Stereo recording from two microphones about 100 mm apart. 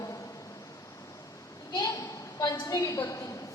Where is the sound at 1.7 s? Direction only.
40° left (ahead or behind).